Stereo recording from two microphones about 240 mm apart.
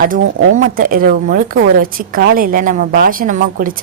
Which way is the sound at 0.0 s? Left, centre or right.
Right.